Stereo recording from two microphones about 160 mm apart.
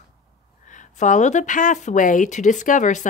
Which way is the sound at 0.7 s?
50° left (ahead or behind).